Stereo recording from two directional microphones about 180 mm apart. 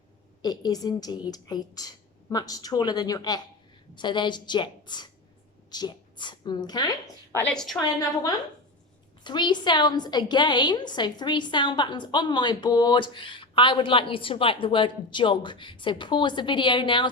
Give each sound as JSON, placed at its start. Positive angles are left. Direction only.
{"t": 0.4, "sound": "a woman's voice", "side_deg": 20}
{"t": 7.3, "sound": "a woman's voice", "side_deg": 5}
{"t": 9.2, "sound": "a woman's voice", "side_deg": 25}